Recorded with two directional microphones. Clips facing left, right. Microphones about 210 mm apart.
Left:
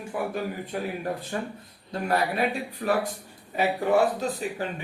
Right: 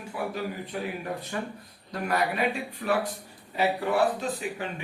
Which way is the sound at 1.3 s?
35° left (ahead or behind).